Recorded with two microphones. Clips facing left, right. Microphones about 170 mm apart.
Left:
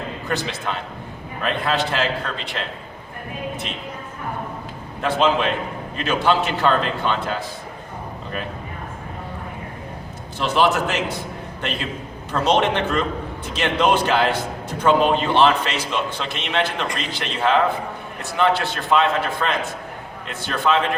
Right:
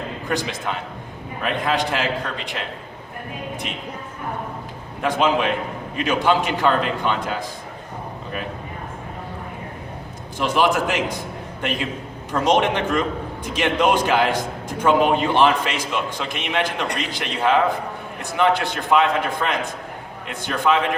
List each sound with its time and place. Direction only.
0.3 s a man's voice: 15° right (ahead or behind)
5.0 s a man's voice: 15° right (ahead or behind)
10.3 s a man's voice: 15° right (ahead or behind)